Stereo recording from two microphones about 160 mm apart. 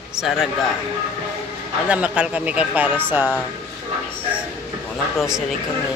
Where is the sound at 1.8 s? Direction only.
10° right (ahead or behind).